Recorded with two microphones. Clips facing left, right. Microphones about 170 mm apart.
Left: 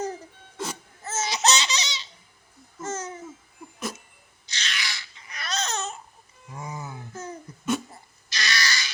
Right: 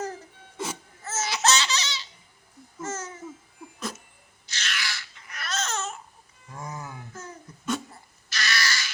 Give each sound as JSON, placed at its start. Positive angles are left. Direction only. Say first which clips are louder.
{"t": 0.5, "sound": "music", "louder": "even", "side_deg": -5}
{"t": 1.0, "sound": "laughter", "louder": "left 1 dB", "side_deg": 15}
{"t": 2.8, "sound": "babbling", "louder": "left 2 dB", "side_deg": 15}
{"t": 4.5, "sound": "babbling", "louder": "even", "side_deg": 15}
{"t": 6.5, "sound": "music", "louder": "left 1 dB", "side_deg": 5}
{"t": 7.1, "sound": "a sound", "louder": "left 5 dB", "side_deg": 20}